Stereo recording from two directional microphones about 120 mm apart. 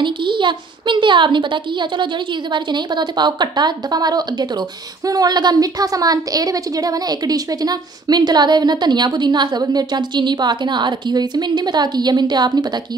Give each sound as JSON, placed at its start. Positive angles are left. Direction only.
{"t": 0.0, "sound": "a woman's voice", "side_deg": -40}